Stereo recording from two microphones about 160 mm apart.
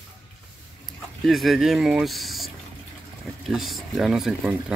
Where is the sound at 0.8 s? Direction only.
Centre (ahead or behind).